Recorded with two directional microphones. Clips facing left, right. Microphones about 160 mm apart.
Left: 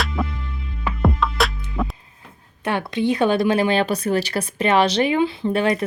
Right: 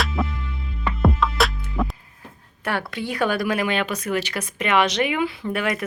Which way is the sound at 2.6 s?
20° left (ahead or behind).